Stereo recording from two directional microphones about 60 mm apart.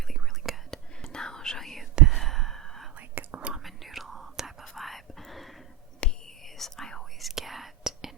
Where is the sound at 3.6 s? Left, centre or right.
Centre.